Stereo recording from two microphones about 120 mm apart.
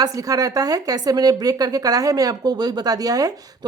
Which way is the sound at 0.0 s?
30° right (ahead or behind).